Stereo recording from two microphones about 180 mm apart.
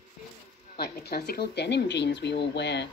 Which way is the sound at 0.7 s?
60° left (ahead or behind).